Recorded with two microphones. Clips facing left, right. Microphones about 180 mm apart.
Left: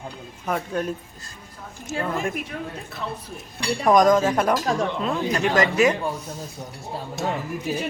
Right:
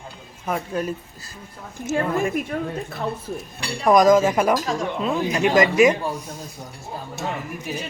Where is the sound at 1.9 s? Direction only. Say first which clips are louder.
Right 5 dB; 55° right (ahead or behind).